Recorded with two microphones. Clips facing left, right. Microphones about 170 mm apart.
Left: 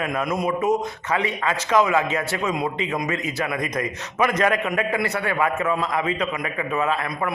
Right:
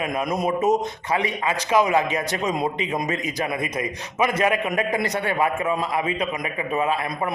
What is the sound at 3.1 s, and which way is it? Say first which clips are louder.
A man's voice: even; 15° right (ahead or behind).